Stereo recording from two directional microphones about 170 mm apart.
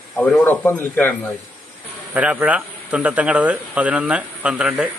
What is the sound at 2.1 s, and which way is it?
Speech, 10° right (ahead or behind).